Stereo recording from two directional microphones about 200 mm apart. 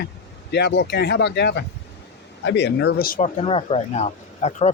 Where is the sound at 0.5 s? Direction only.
60° left (ahead or behind).